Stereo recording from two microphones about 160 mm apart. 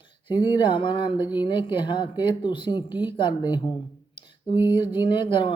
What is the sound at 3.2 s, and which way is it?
Speech, 30° left (ahead or behind).